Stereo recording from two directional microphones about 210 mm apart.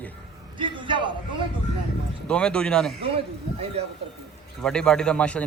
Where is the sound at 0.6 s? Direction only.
25° right (ahead or behind).